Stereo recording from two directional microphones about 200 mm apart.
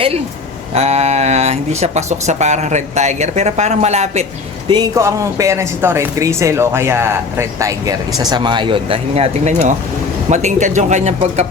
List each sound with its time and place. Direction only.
0.7 s speech: 30° right (ahead or behind)
4.7 s speech: 20° right (ahead or behind); by 11.4 s 35° right (ahead or behind)